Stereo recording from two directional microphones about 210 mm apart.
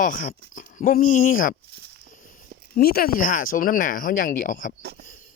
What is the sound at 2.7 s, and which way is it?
Speech, 45° left (ahead or behind).